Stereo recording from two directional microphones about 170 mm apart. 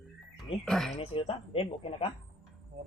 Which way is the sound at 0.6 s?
Centre (ahead or behind).